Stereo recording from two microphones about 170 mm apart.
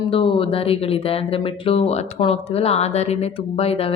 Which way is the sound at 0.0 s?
30° left (ahead or behind).